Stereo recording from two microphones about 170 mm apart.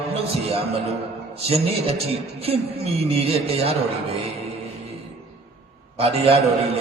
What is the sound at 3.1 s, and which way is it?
Speech, 35° right (ahead or behind).